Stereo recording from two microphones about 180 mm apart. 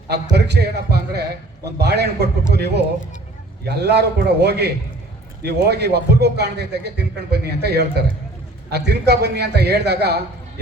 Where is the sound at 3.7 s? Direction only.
65° right (ahead or behind).